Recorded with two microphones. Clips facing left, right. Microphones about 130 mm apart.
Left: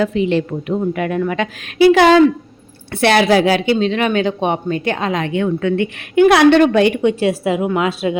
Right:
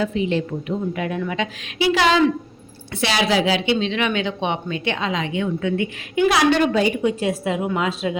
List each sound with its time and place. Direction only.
0.0 s speech: 70° left (ahead or behind)